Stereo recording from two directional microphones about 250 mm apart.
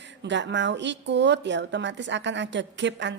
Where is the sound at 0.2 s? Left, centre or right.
Right.